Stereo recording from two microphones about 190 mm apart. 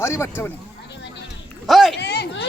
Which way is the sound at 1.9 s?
60° left (ahead or behind).